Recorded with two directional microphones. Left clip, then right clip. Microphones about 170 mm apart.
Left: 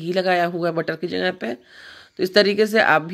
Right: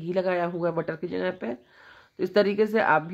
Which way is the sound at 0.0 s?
15° left (ahead or behind).